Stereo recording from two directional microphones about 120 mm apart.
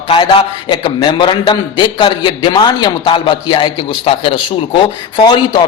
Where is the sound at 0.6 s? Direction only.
35° left (ahead or behind).